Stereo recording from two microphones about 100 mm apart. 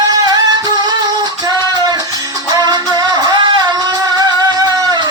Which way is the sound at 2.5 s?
45° right (ahead or behind).